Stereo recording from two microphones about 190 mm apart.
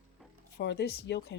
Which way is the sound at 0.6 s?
60° left (ahead or behind).